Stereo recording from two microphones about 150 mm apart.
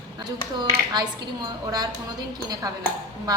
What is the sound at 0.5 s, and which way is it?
A woman's voice, 30° right (ahead or behind).